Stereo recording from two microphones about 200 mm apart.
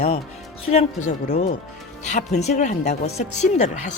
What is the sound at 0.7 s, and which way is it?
Speech, 35° left (ahead or behind).